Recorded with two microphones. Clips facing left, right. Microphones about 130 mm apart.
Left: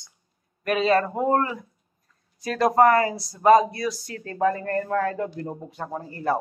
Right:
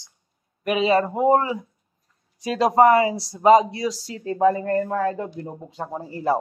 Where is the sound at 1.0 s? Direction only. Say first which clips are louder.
Right 4 dB; 15° right (ahead or behind).